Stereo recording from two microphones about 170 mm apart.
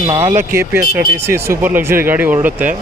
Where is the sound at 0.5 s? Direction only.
15° right (ahead or behind).